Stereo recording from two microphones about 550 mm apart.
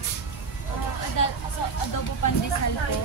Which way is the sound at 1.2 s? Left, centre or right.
Left.